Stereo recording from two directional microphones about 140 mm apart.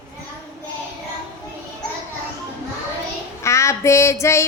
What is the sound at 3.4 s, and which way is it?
Child singing, 20° left (ahead or behind).